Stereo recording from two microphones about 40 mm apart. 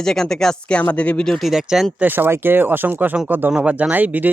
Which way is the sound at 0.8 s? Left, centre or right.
Left.